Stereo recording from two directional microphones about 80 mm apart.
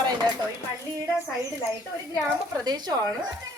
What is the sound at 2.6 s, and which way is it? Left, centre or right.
Speech, right.